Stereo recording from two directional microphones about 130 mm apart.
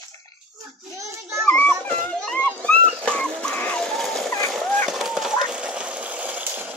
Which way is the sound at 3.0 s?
10° left (ahead or behind).